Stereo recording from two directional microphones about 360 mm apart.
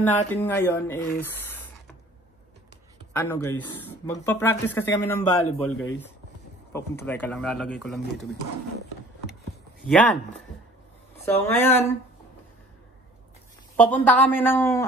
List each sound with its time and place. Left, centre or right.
0.0 s speech: centre
3.1 s speech: centre
9.8 s speech: centre
13.7 s speech: centre